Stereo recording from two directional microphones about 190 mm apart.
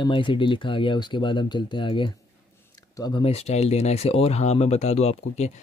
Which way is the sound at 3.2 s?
35° left (ahead or behind).